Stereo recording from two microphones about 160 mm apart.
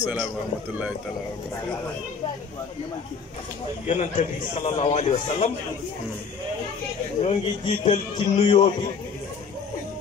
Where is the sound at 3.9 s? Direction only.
50° left (ahead or behind).